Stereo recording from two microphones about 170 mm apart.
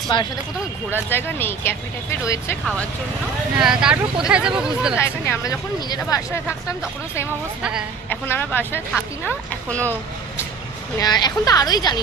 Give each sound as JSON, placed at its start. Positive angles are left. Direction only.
{"t": 0.1, "sound": "speech", "side_deg": 30}
{"t": 1.1, "sound": "speech", "side_deg": 15}
{"t": 3.6, "sound": "speech", "side_deg": -5}
{"t": 5.0, "sound": "speech", "side_deg": 15}
{"t": 8.1, "sound": "speech", "side_deg": 10}
{"t": 11.0, "sound": "speech", "side_deg": 25}